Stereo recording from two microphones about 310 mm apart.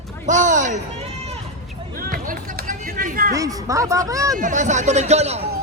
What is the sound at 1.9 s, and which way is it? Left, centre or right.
Hubbub, right.